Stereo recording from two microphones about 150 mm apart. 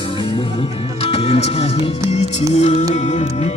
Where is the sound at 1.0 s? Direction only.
40° left (ahead or behind).